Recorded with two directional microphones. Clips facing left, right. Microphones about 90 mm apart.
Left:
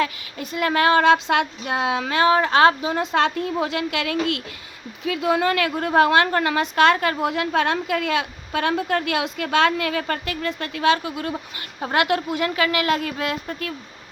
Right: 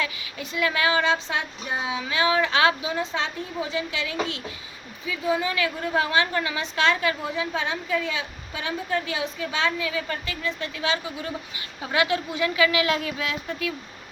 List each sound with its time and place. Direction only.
0.0 s child singing: 50° left (ahead or behind)
3.0 s a woman's voice: 60° left (ahead or behind)